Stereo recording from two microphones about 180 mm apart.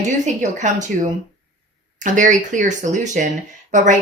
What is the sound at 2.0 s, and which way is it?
Speech, 45° right (ahead or behind).